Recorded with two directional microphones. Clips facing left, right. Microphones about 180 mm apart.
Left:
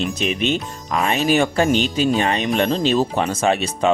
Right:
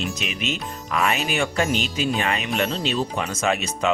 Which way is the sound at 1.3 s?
40° left (ahead or behind).